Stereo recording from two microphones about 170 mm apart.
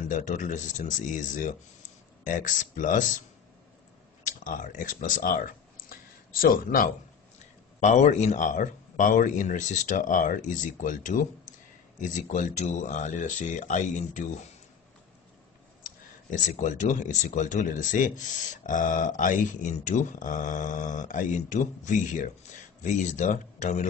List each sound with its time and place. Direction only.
0.0 s speech: 50° left (ahead or behind)
4.5 s speech: 50° left (ahead or behind)
7.8 s speech: 45° left (ahead or behind)
15.8 s speech: 50° left (ahead or behind)